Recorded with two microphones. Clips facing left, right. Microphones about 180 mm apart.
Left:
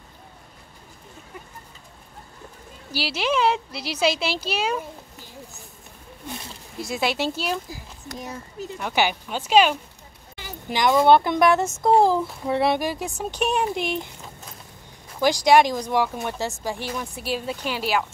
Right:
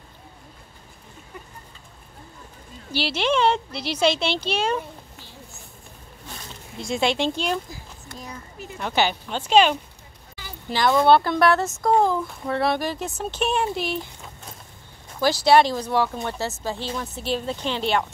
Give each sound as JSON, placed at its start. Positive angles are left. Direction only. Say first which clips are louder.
{"t": 2.9, "sound": "speech", "louder": "right 2 dB", "side_deg": 5}
{"t": 6.8, "sound": "speech", "louder": "right 2 dB", "side_deg": 5}
{"t": 8.7, "sound": "speech", "louder": "right 1 dB", "side_deg": 10}
{"t": 11.8, "sound": "speech", "louder": "left 3 dB", "side_deg": 30}
{"t": 12.4, "sound": "speech", "louder": "left 1 dB", "side_deg": 20}
{"t": 15.1, "sound": "speech", "louder": "even", "side_deg": 15}